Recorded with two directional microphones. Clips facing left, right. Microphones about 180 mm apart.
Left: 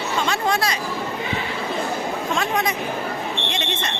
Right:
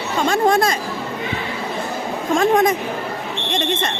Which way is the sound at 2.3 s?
50° right (ahead or behind).